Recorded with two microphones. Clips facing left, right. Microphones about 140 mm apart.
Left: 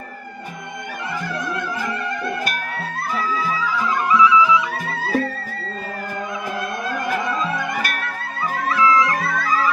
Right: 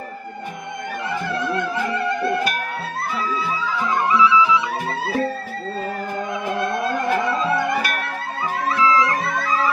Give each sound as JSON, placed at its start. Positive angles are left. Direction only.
{"t": 4.1, "sound": "music", "side_deg": -30}
{"t": 8.7, "sound": "music", "side_deg": -30}